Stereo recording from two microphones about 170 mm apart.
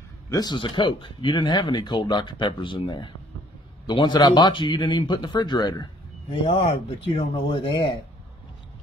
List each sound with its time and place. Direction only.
0.3 s speech: 25° left (ahead or behind)